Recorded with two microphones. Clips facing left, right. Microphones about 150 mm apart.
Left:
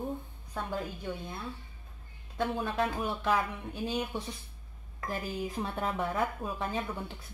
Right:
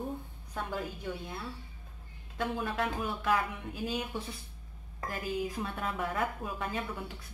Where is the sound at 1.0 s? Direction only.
20° left (ahead or behind).